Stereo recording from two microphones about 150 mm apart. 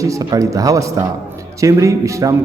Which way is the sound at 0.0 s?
20° right (ahead or behind).